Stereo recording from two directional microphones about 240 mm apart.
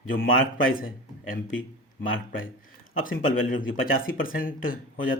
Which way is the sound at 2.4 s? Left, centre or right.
Left.